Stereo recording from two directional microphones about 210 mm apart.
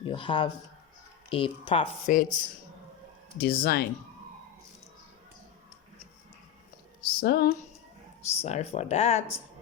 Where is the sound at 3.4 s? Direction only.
45° left (ahead or behind).